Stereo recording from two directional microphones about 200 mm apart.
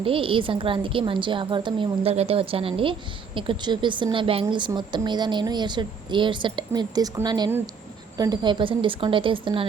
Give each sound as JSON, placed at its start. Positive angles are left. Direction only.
{"t": 0.0, "sound": "a woman's voice", "side_deg": -25}